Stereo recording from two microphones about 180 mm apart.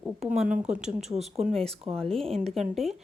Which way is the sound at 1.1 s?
35° right (ahead or behind).